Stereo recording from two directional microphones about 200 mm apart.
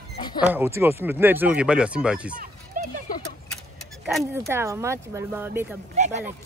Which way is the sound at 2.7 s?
40° right (ahead or behind).